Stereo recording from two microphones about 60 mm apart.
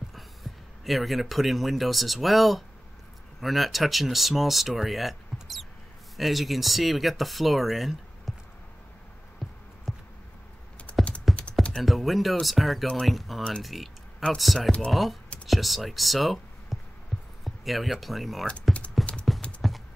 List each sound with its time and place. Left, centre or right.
0.1 s speech: centre
9.4 s music: centre
9.9 s a sound: centre
10.9 s computer keyboard: centre
11.3 s typing: centre
11.8 s speech: centre
17.1 s a sound: centre
17.5 s a sound: centre
18.0 s speech: centre
18.5 s speech: left
19.3 s clip-clop: centre